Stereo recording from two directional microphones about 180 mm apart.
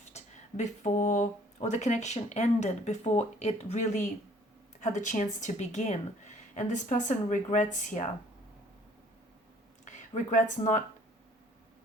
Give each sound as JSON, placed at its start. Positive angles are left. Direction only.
{"t": 0.0, "sound": "a woman's voice", "side_deg": 40}
{"t": 9.8, "sound": "speech", "side_deg": 40}